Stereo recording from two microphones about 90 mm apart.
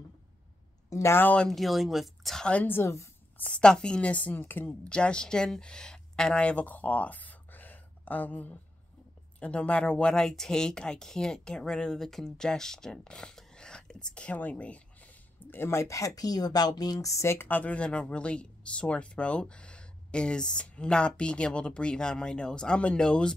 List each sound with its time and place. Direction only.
0.8 s speech: 35° left (ahead or behind)
1.2 s speech: 15° left (ahead or behind)
1.5 s speech: centre (ahead or behind)
2.6 s a woman's voice: 25° left (ahead or behind)
3.3 s speech: 15° left (ahead or behind)
4.8 s speech: 10° left (ahead or behind)
15.5 s speech: 30° left (ahead or behind); by 23.3 s 10° left (ahead or behind)